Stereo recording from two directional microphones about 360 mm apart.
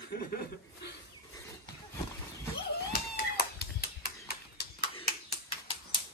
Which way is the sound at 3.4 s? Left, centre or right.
Left.